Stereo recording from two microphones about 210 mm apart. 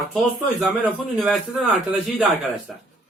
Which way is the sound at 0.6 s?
Centre (ahead or behind).